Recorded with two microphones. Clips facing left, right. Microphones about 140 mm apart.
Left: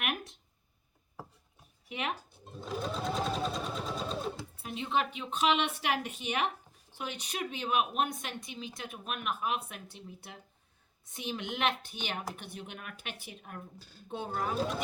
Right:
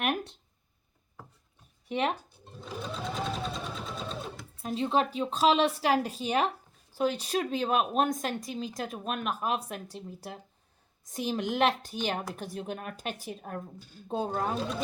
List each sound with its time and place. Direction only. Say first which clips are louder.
0.0 s a sound: right 6 dB; 30° right (ahead or behind)
1.9 s speech: right 7 dB; 35° right (ahead or behind)
2.4 s sewing machine: left 3 dB; centre (ahead or behind)
4.6 s speech: right 5 dB; 35° right (ahead or behind)